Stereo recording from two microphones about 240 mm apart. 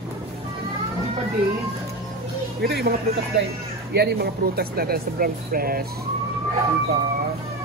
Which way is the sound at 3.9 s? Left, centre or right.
Right.